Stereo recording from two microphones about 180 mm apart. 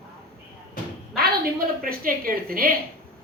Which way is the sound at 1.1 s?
55° right (ahead or behind).